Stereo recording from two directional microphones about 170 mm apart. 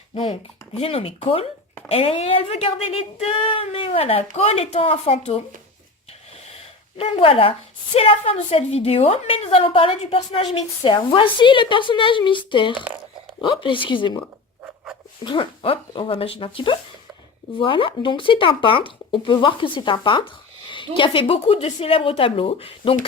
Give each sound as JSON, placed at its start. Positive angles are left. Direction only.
{"t": 0.1, "sound": "a woman's voice", "side_deg": 35}
{"t": 6.9, "sound": "a woman's voice", "side_deg": 35}
{"t": 15.2, "sound": "a woman's voice", "side_deg": 30}